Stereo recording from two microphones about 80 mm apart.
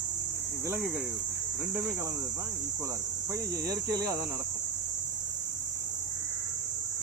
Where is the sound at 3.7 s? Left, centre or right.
Right.